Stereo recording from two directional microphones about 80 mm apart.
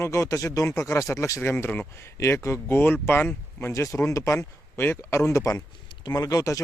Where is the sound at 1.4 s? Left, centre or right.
Left.